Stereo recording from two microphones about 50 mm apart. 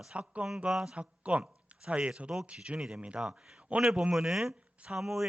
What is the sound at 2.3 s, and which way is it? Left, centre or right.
Speech, centre.